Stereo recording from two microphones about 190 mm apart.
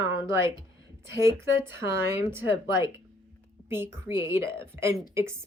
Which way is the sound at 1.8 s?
15° right (ahead or behind).